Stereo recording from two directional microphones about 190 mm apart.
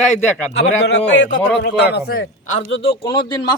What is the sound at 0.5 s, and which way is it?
A man's voice, 70° left (ahead or behind).